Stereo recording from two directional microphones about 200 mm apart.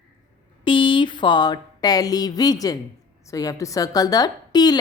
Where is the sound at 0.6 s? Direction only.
25° left (ahead or behind).